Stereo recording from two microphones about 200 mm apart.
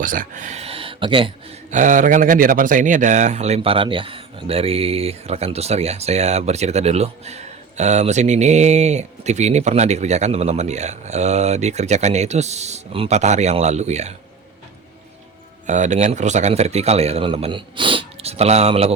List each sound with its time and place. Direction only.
0.0 s speech: 40° right (ahead or behind); by 1.3 s 25° right (ahead or behind)
1.7 s speech: 40° right (ahead or behind)
15.6 s speech: 35° right (ahead or behind)